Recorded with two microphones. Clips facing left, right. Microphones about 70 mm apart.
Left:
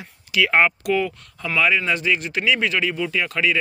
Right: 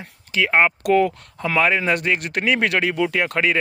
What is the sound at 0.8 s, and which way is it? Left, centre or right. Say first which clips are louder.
Speech: right 5 dB; right.